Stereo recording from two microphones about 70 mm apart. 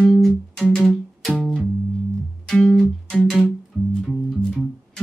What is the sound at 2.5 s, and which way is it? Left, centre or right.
Music, centre.